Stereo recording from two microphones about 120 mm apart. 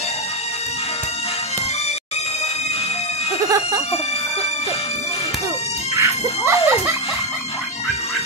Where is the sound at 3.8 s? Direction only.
60° left (ahead or behind).